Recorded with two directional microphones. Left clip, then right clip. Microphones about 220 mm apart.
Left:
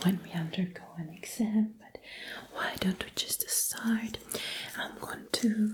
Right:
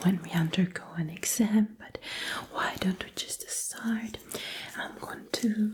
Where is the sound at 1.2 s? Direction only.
65° right (ahead or behind).